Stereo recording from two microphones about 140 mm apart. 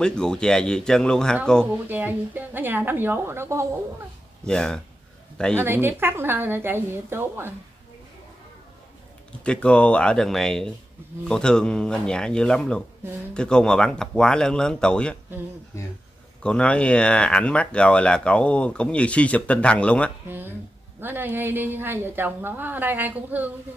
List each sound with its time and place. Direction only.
0.0 s speech: 5° left (ahead or behind)
1.9 s a woman's voice: 10° right (ahead or behind)
4.5 s speech: 5° left (ahead or behind)
5.6 s a woman's voice: 15° right (ahead or behind)
9.4 s speech: 5° left (ahead or behind)
16.4 s speech: 10° left (ahead or behind)
20.2 s a woman's voice: 15° right (ahead or behind)